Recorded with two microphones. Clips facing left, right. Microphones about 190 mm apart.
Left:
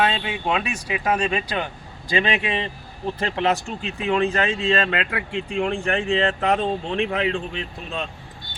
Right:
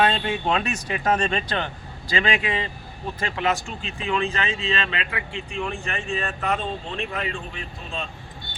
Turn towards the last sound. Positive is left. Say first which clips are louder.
# left 4 dB
turn(degrees=65)  # may be behind; listen again after turning